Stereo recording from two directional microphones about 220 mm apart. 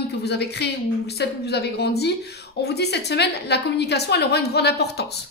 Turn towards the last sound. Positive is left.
turn(degrees=50)  # may be behind; listen again after turning